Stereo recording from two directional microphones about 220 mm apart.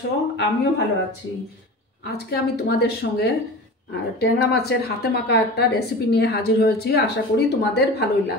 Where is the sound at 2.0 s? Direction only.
45° left (ahead or behind).